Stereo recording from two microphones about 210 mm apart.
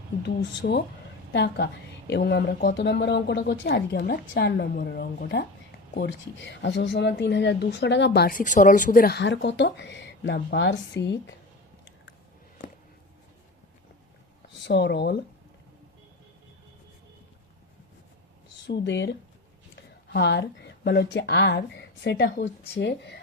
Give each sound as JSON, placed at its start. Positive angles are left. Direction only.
{"t": 0.6, "sound": "a woman's voice", "side_deg": 50}
{"t": 6.0, "sound": "speech", "side_deg": 60}
{"t": 14.6, "sound": "speech", "side_deg": 55}
{"t": 18.6, "sound": "speech", "side_deg": 60}